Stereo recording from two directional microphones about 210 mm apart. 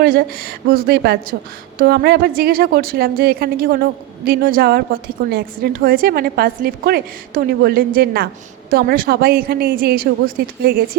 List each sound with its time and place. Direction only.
0.0 s a woman's voice: 45° right (ahead or behind)